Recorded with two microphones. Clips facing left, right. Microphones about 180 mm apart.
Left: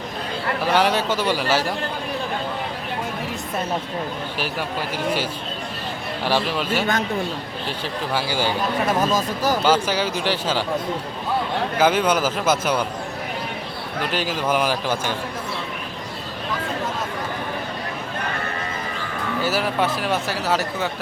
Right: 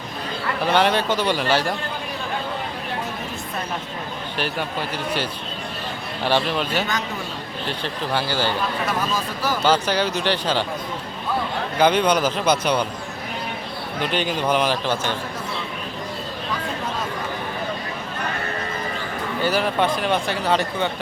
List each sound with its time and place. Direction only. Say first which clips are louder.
0.7 s a man's voice: right 1 dB; 5° left (ahead or behind)
4.4 s a man's voice: right 3 dB; 5° left (ahead or behind)
6.2 s speech: right 1 dB; 5° left (ahead or behind)
8.1 s a man's voice: even; 10° left (ahead or behind)
9.1 s speech: left 3 dB; 40° left (ahead or behind)
9.6 s a man's voice: right 3 dB; 10° left (ahead or behind)
11.8 s a man's voice: right 1 dB; 5° left (ahead or behind)
14.0 s a man's voice: right 1 dB; 5° left (ahead or behind)
19.4 s speech: right 1 dB; 5° left (ahead or behind)